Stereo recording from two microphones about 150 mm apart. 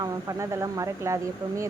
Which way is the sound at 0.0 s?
20° right (ahead or behind).